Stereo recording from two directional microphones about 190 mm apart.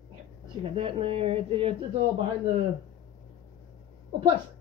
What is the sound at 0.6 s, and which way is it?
A woman's voice, 30° right (ahead or behind).